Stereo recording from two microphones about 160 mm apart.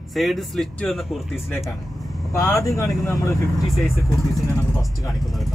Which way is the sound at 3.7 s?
Centre (ahead or behind).